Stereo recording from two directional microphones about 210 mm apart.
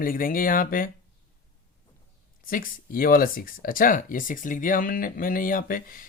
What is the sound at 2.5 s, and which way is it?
Speech, 40° left (ahead or behind).